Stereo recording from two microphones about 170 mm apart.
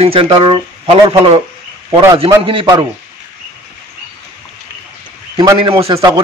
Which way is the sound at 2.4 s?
30° right (ahead or behind).